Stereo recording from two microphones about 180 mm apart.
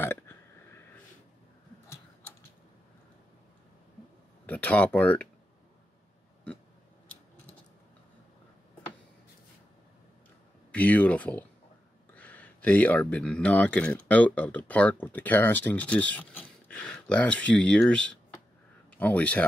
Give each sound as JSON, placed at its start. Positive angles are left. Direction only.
{"t": 0.0, "sound": "a sound", "side_deg": 10}
{"t": 4.5, "sound": "speech", "side_deg": 10}
{"t": 10.7, "sound": "speech", "side_deg": 10}